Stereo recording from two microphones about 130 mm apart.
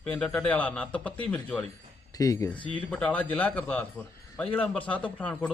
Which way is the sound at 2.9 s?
10° left (ahead or behind).